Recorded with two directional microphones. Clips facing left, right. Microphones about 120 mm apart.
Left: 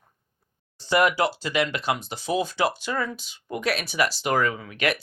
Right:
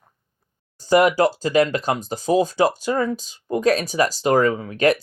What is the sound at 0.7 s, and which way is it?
Speech, 45° right (ahead or behind).